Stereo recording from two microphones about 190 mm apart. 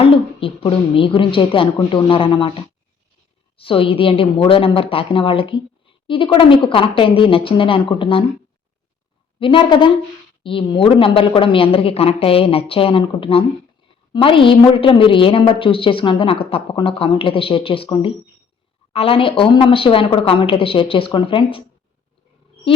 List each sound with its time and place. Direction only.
0.0 s a woman's voice: 30° left (ahead or behind)
9.4 s a woman's voice: 25° left (ahead or behind)